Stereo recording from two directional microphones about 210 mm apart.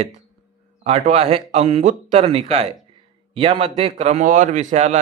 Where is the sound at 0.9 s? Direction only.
30° right (ahead or behind).